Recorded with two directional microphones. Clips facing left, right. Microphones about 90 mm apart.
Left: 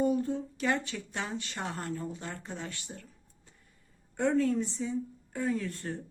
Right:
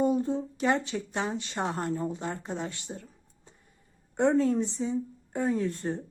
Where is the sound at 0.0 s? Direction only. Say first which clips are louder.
Right 3 dB; 20° right (ahead or behind).